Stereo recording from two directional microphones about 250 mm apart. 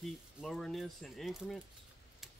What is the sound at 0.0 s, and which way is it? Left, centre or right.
Speech, centre.